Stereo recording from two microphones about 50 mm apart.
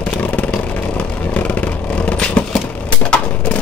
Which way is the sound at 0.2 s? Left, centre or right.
Left.